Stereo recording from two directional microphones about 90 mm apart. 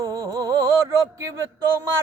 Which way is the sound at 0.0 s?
40° right (ahead or behind).